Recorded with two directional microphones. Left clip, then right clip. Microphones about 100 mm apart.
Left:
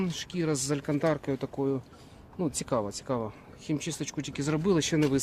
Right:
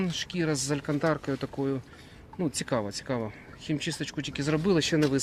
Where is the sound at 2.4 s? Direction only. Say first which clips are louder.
Even; 15° left (ahead or behind).